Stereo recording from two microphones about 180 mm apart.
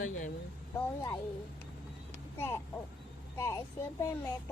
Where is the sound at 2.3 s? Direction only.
15° left (ahead or behind).